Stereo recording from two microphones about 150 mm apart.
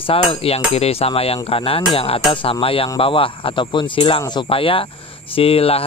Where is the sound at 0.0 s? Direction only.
40° left (ahead or behind).